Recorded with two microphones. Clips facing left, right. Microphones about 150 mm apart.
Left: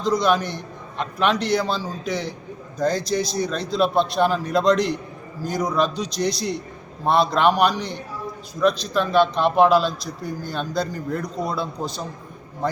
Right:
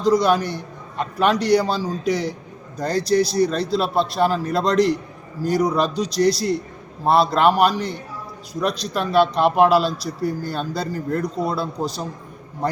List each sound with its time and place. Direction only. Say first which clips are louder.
0.0 s a man's voice: right 3 dB; 10° right (ahead or behind)
3.5 s a man's voice: right 4 dB; 35° right (ahead or behind)
3.8 s a man's voice: left 2 dB; 5° right (ahead or behind)